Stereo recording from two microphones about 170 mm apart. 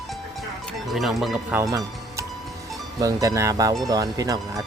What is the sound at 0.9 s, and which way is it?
Speech, centre (ahead or behind).